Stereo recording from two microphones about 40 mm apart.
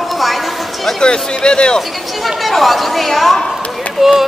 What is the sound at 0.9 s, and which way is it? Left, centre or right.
Speech, centre.